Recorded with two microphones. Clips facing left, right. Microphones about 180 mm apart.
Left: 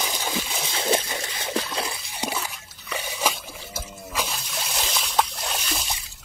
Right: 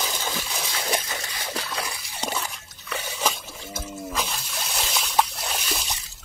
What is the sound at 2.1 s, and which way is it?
Trickle, 5° left (ahead or behind).